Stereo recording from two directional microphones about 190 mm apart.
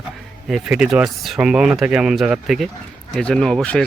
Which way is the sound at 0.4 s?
5° right (ahead or behind).